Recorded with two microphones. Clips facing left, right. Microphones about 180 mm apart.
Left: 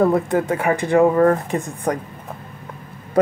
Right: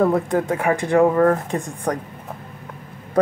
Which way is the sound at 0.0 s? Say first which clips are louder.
Left 1 dB; 5° left (ahead or behind).